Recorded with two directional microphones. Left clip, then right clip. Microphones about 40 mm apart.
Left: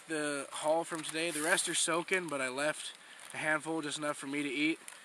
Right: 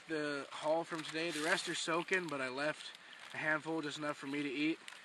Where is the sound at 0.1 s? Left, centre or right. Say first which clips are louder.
Left 3 dB; left.